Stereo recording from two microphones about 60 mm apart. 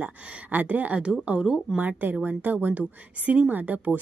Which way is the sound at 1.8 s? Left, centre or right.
Right.